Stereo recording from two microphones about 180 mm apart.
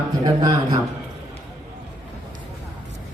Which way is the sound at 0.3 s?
20° right (ahead or behind).